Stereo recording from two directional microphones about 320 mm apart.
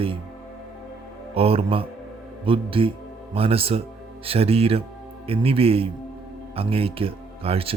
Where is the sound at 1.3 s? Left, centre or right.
Centre.